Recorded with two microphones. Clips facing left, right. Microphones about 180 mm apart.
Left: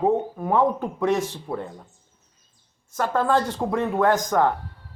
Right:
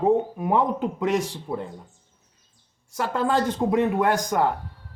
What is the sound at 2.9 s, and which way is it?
Speech, 15° right (ahead or behind).